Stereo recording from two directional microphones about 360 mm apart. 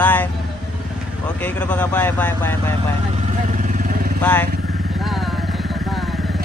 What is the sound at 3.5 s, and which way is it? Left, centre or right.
Vehicle, right.